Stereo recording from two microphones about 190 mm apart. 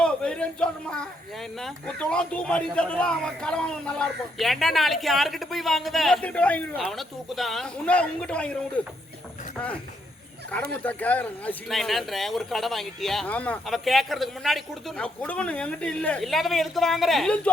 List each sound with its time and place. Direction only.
0.0 s speech: 5° left (ahead or behind)
10.5 s speech: 5° left (ahead or behind)